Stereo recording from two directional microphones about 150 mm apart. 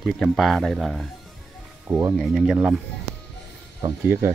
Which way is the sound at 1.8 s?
15° right (ahead or behind).